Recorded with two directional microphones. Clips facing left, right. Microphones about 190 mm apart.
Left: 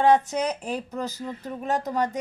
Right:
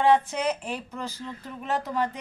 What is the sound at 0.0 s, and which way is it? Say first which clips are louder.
Speech: left 2 dB; 45° left (ahead or behind).